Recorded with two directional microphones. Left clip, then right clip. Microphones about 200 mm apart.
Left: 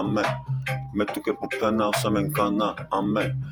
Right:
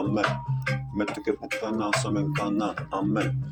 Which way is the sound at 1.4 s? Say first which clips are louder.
Left 5 dB; 50° left (ahead or behind).